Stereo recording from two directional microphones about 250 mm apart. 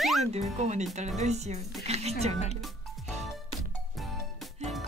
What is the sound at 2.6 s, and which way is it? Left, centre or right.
Music, centre.